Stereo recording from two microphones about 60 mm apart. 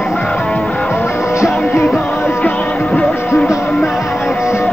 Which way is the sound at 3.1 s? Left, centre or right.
Left.